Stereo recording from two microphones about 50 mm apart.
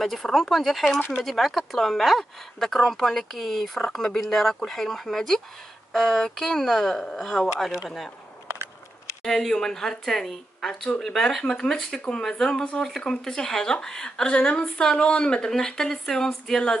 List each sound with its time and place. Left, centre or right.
0.0 s speech: centre
9.2 s speech: centre
12.4 s speech: centre